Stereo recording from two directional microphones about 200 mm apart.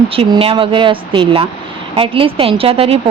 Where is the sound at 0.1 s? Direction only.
25° right (ahead or behind).